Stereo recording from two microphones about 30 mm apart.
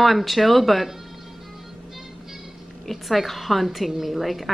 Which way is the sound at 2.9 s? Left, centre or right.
Centre.